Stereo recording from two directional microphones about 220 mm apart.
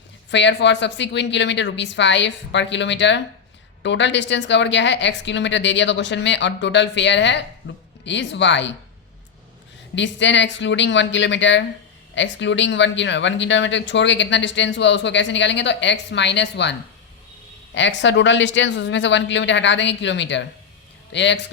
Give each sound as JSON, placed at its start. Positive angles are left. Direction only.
{"t": 0.3, "sound": "a woman's voice", "side_deg": 55}
{"t": 9.9, "sound": "speech", "side_deg": 55}
{"t": 17.7, "sound": "a man's voice", "side_deg": 55}